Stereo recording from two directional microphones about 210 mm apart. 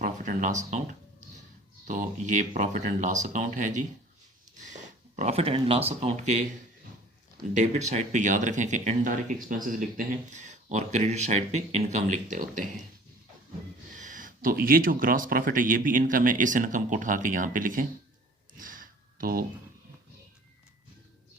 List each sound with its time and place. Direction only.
0.0 s speech: 35° right (ahead or behind)
1.8 s speech: 35° right (ahead or behind)
7.5 s speech: 35° right (ahead or behind)
13.9 s speech: 40° right (ahead or behind)
18.5 s a sound: 40° right (ahead or behind)